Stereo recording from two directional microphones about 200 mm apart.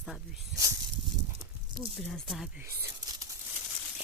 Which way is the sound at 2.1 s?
Centre (ahead or behind).